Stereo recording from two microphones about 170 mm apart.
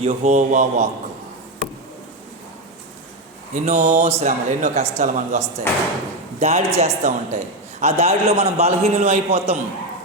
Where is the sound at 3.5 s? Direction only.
40° right (ahead or behind).